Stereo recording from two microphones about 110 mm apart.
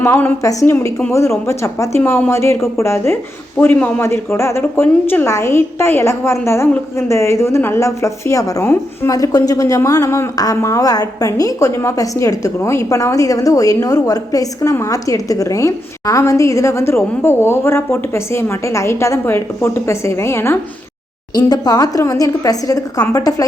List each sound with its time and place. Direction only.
0.0 s a woman's voice: 20° left (ahead or behind)
21.3 s a woman's voice: 40° left (ahead or behind)